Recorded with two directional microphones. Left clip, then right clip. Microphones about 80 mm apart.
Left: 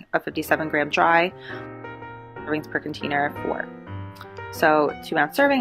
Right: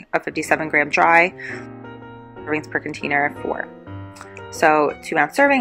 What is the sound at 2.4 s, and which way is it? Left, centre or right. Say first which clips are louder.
Speech: right 3 dB; centre.